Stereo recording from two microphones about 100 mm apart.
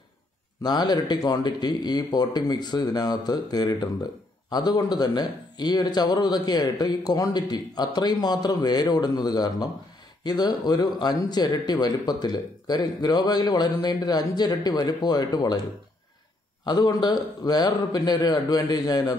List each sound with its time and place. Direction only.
0.6 s speech: 45° left (ahead or behind)
16.6 s a man's voice: 45° left (ahead or behind)